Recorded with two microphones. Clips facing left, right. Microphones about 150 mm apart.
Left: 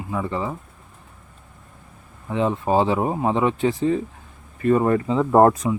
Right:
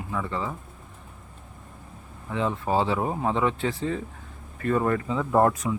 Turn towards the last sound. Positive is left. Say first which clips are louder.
# left 6 dB
turn(degrees=35)  # may be behind; listen again after turning